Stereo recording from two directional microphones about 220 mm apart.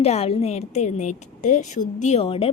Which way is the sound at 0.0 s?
30° left (ahead or behind).